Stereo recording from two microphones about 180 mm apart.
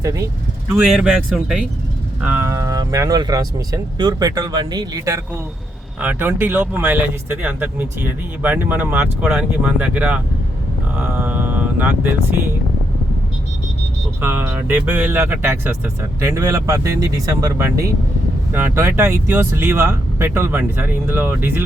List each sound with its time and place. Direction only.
0.0 s speech: 15° right (ahead or behind)
0.8 s speech: 5° right (ahead or behind)
11.0 s a sound: 10° right (ahead or behind)
14.2 s speech: 10° right (ahead or behind)